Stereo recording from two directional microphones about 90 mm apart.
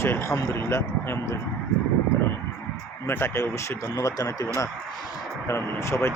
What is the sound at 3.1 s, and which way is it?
Speech, 25° left (ahead or behind).